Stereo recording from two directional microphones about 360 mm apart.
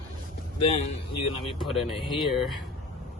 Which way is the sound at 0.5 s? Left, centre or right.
Centre.